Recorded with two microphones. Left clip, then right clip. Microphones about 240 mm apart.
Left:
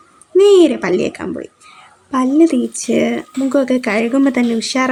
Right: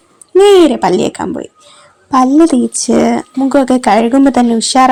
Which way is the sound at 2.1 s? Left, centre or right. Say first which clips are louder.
Right 5 dB; centre.